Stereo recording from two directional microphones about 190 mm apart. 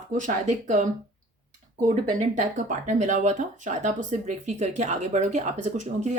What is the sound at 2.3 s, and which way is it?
Speech, 40° right (ahead or behind).